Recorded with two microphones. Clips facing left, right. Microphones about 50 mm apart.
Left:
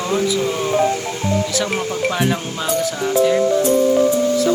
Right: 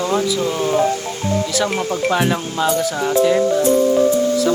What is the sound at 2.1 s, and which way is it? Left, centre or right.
Speech, centre.